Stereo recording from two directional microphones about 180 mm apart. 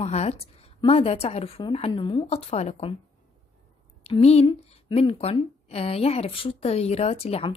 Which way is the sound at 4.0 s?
35° left (ahead or behind).